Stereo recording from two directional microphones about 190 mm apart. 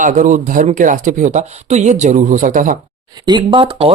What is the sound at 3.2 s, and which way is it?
Speech, 25° right (ahead or behind).